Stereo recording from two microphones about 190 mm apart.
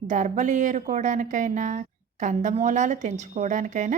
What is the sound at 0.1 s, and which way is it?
Speech, 40° right (ahead or behind).